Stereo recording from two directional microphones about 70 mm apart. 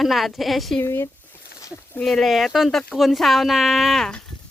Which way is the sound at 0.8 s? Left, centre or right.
Left.